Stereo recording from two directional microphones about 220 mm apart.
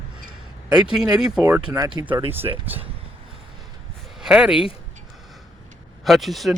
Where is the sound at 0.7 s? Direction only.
5° right (ahead or behind).